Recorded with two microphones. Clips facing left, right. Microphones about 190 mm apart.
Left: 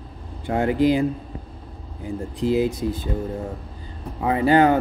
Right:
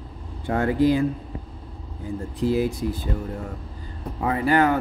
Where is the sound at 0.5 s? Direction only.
20° left (ahead or behind).